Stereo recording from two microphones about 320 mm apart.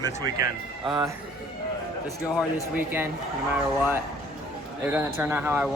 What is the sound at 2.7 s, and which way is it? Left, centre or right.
Speech, centre.